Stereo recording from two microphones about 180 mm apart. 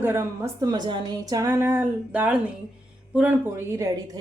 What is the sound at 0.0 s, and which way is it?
A woman's voice, 15° right (ahead or behind).